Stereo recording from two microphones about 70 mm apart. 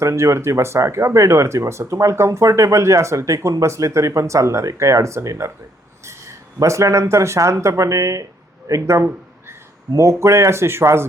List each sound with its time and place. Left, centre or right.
0.0 s speech: right